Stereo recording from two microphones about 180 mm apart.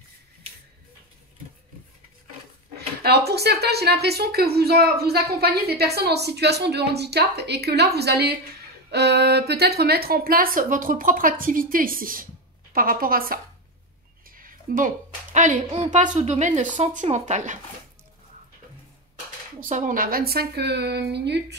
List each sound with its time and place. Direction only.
3.0 s a woman's voice: 65° right (ahead or behind); by 17.6 s 40° right (ahead or behind)
19.6 s a woman's voice: 45° right (ahead or behind); by 21.5 s 70° right (ahead or behind)